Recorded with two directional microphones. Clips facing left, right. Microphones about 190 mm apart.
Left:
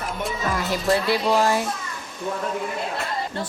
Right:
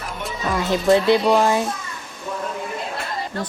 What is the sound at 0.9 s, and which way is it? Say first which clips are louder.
Speech: right 8 dB; 20° right (ahead or behind).